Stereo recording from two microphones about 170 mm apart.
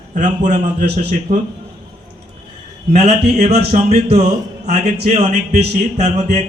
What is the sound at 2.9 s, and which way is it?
A man's voice, 40° right (ahead or behind).